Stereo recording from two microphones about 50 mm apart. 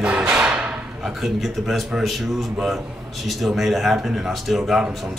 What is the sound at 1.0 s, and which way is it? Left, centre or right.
A man's voice, centre.